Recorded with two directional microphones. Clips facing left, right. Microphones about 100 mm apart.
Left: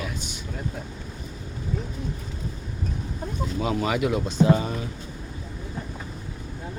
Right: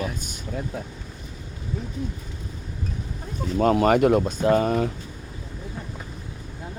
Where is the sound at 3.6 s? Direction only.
50° right (ahead or behind).